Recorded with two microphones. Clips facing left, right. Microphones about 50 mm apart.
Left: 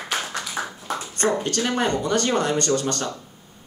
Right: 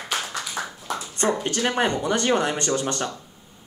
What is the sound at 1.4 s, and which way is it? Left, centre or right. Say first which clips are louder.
Speech: even; centre.